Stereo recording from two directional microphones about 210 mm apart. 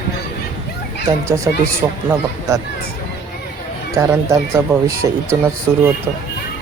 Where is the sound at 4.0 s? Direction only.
15° right (ahead or behind).